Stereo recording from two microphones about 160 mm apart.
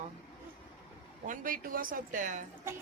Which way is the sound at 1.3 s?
60° right (ahead or behind).